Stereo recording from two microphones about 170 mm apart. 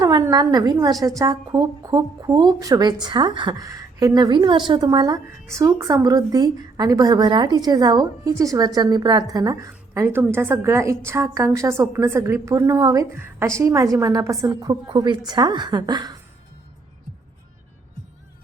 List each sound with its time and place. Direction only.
0.0 s a woman's voice: 20° right (ahead or behind)